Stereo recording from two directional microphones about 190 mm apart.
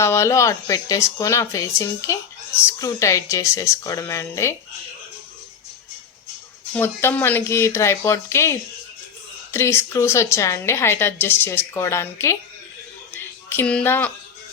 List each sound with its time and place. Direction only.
0.0 s a woman's voice: 15° left (ahead or behind)
6.7 s a woman's voice: 10° left (ahead or behind)
13.1 s music: 10° left (ahead or behind)